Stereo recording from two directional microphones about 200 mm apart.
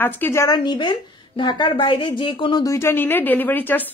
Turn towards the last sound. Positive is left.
turn(degrees=10)  # may be behind; listen again after turning